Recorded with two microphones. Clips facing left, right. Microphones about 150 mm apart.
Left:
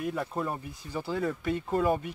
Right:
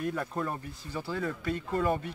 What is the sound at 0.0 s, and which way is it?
Speech, 5° left (ahead or behind).